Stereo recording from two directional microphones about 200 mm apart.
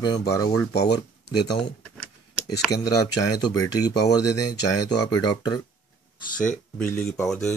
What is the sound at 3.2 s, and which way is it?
Speech, 20° left (ahead or behind).